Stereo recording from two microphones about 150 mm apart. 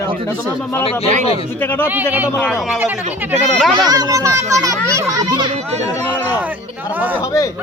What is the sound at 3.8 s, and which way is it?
A child's voice, 25° right (ahead or behind).